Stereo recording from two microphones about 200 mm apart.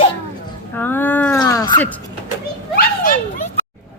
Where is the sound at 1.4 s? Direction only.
20° left (ahead or behind).